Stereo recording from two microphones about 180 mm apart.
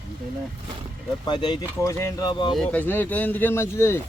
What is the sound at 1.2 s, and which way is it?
Speech, 25° left (ahead or behind).